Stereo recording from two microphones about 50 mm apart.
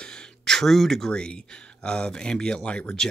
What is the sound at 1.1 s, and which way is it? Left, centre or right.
Speech, centre.